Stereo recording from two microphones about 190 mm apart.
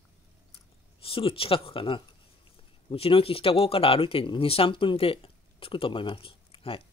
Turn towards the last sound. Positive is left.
turn(degrees=30)  # may be behind; listen again after turning